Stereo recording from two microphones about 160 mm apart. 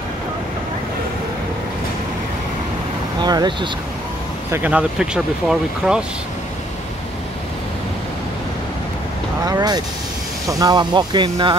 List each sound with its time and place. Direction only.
3.2 s speech: 25° right (ahead or behind)
4.5 s speech: 10° right (ahead or behind)
9.4 s speech: 25° right (ahead or behind)